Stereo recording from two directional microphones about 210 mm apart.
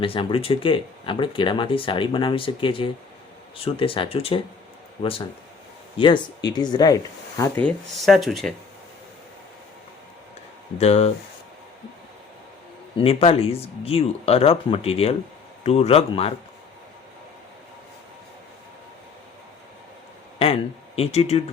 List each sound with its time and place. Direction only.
0.0 s speech: 25° left (ahead or behind); by 8.5 s centre (ahead or behind)
10.8 s speech: 30° left (ahead or behind)
13.0 s speech: 25° left (ahead or behind)
20.4 s speech: 30° left (ahead or behind)